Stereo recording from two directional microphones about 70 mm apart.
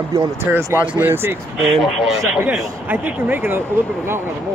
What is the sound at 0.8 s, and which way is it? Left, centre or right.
Speech, right.